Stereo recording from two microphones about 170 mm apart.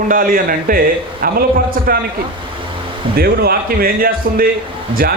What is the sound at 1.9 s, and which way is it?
Speech, 60° right (ahead or behind).